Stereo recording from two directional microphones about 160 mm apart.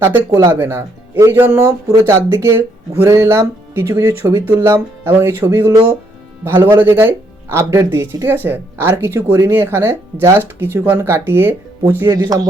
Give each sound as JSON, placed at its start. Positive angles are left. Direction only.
{"t": 0.0, "sound": "speech", "side_deg": -15}